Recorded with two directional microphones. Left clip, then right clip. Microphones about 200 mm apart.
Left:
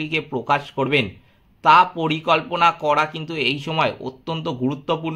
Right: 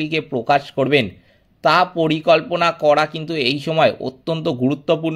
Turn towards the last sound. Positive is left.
turn(degrees=-25)  # may be behind; listen again after turning